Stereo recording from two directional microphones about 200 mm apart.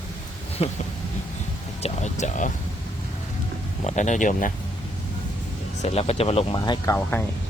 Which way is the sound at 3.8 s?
35° left (ahead or behind).